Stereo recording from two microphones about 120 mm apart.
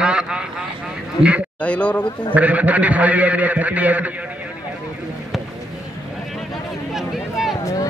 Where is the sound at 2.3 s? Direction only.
10° right (ahead or behind).